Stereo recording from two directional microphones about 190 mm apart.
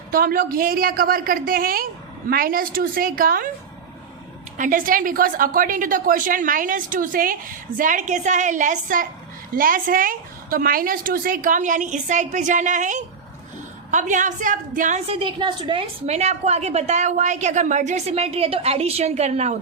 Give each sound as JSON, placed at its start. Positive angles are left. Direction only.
{"t": 0.1, "sound": "a woman's voice", "side_deg": -50}
{"t": 4.5, "sound": "a woman's voice", "side_deg": -45}